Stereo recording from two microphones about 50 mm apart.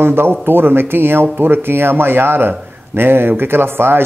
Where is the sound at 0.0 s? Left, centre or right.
Right.